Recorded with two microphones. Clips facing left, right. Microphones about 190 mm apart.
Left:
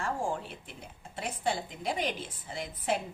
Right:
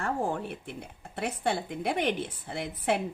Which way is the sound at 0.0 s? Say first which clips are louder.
Right 3 dB; 60° right (ahead or behind).